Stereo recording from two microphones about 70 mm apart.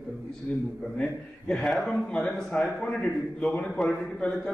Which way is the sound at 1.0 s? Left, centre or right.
Centre.